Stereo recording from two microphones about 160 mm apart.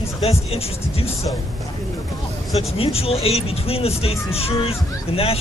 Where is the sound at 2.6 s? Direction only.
35° left (ahead or behind).